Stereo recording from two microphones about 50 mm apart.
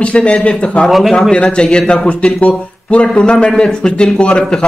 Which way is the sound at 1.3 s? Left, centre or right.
Centre.